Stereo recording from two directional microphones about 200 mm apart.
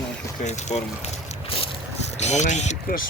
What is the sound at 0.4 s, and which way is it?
Speech, 35° left (ahead or behind).